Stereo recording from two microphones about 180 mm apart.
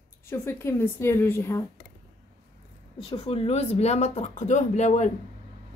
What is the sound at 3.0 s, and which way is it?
Speech, 30° left (ahead or behind).